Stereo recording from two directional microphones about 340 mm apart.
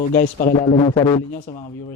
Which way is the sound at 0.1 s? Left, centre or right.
Left.